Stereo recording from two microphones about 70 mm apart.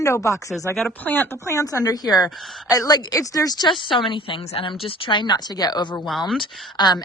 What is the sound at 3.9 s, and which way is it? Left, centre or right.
Speech, left.